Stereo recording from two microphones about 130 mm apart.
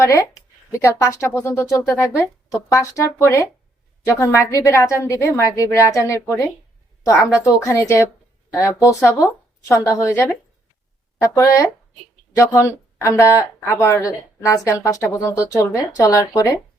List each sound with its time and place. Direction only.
0.0 s speech: 25° left (ahead or behind)
7.6 s speech: 25° left (ahead or behind)